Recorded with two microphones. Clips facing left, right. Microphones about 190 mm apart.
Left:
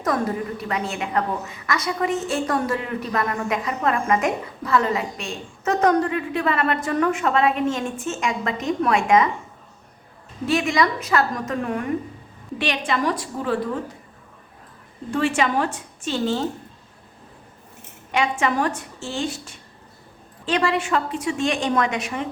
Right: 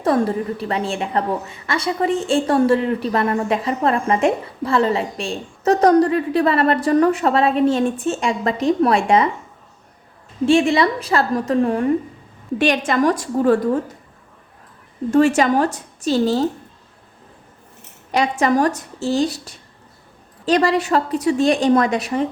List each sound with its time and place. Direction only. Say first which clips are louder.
0.0 s a woman's voice: right 5 dB; 30° right (ahead or behind)
10.4 s a woman's voice: right 6 dB; 30° right (ahead or behind)
12.5 s a woman's voice: right 6 dB; 45° right (ahead or behind)
15.1 s a woman's voice: right 7 dB; 40° right (ahead or behind)
18.1 s a woman's voice: right 5 dB; 40° right (ahead or behind)